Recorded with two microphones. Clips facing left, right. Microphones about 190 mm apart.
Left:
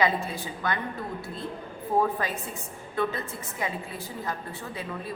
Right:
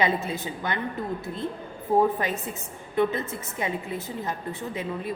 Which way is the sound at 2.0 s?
20° right (ahead or behind).